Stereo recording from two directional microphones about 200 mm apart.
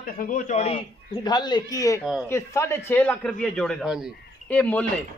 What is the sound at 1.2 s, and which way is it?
Speech, 20° left (ahead or behind).